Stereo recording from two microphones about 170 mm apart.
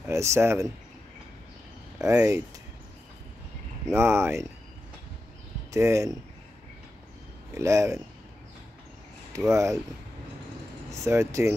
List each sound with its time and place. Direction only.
0.0 s speech: 15° right (ahead or behind)
2.0 s speech: 15° right (ahead or behind)
3.8 s speech: 15° right (ahead or behind)
5.7 s speech: 15° right (ahead or behind)
7.5 s speech: 15° right (ahead or behind)
9.5 s speech: 15° right (ahead or behind)
10.9 s speech: 15° right (ahead or behind)